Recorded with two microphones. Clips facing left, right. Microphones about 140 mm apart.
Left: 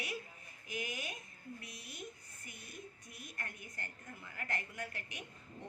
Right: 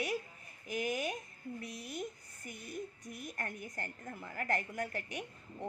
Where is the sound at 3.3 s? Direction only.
45° right (ahead or behind).